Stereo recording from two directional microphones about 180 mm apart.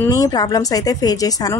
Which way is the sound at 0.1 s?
20° left (ahead or behind).